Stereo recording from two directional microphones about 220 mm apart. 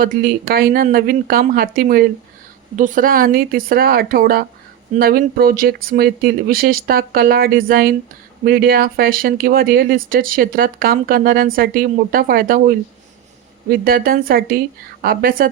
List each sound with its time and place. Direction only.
0.0 s speech: 40° right (ahead or behind)